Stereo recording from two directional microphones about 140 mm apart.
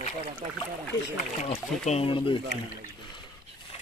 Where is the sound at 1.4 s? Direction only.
50° left (ahead or behind).